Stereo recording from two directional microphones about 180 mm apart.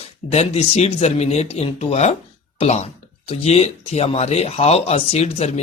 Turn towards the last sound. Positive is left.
turn(degrees=35)  # may be behind; listen again after turning